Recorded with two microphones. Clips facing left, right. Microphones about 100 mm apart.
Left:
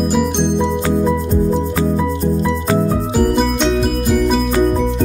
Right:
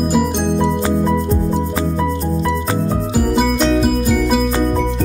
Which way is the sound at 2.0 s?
Centre (ahead or behind).